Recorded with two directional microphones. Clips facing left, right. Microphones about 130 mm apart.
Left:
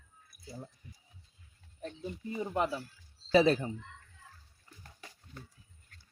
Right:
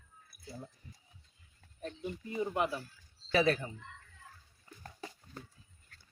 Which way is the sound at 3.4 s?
30° left (ahead or behind).